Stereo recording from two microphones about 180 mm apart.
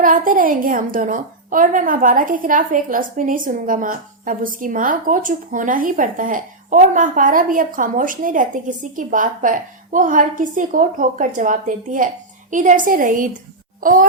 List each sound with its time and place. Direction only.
0.0 s a woman's voice: 50° right (ahead or behind)